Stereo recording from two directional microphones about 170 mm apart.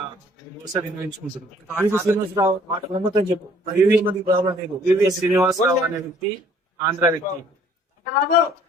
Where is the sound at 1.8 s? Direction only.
15° right (ahead or behind).